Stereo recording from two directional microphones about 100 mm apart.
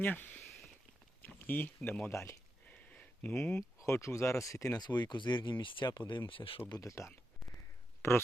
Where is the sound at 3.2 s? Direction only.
15° left (ahead or behind).